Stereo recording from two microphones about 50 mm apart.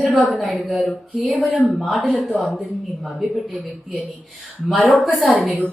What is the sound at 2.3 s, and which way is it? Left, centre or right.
Speech, left.